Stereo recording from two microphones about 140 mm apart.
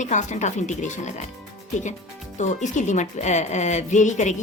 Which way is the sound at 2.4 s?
55° left (ahead or behind).